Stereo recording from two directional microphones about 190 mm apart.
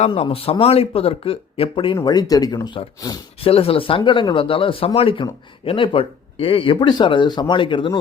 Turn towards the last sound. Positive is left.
turn(degrees=25)  # may be behind; listen again after turning